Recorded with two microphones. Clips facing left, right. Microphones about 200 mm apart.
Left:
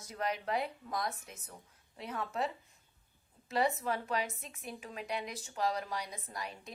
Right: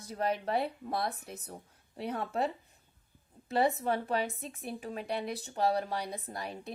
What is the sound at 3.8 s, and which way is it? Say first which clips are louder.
Speech: right 4 dB; 30° right (ahead or behind).